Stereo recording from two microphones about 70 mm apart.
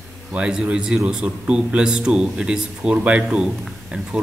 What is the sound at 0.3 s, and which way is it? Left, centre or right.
A man's voice, centre.